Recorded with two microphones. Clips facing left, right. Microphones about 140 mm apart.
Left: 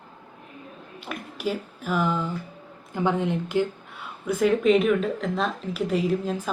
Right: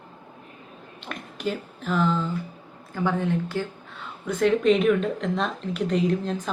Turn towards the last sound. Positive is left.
turn(degrees=5)  # may be behind; listen again after turning